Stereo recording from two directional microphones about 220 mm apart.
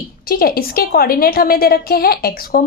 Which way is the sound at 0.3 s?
40° left (ahead or behind).